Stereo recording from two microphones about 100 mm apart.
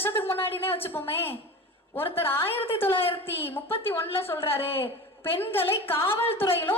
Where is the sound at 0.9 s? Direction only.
25° left (ahead or behind).